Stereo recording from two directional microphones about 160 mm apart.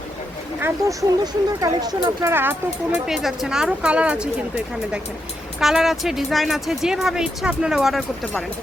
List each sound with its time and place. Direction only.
0.6 s speech: 20° right (ahead or behind)
2.3 s speech: 15° right (ahead or behind)
3.1 s speech: centre (ahead or behind)